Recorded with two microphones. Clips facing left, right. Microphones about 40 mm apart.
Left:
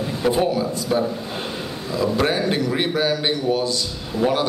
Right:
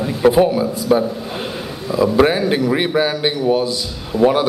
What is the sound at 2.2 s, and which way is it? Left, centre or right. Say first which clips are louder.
A man's voice: right 6 dB; centre.